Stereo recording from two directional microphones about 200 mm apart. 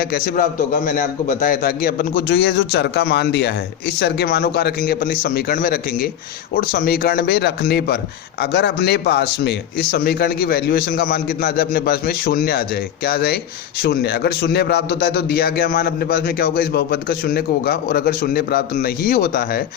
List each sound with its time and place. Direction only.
0.0 s a man's voice: 45° left (ahead or behind)